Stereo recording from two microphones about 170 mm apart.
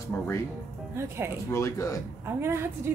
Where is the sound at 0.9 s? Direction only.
15° right (ahead or behind).